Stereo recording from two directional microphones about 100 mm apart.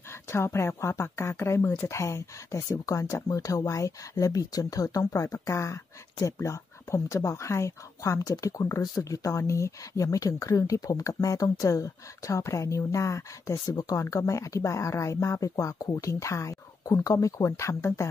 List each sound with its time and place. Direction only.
0.1 s speech: 25° left (ahead or behind)